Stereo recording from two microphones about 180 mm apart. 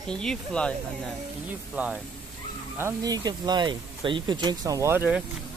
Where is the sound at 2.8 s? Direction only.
20° right (ahead or behind).